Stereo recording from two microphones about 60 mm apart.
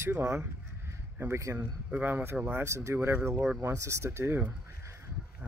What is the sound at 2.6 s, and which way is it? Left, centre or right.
Speech, right.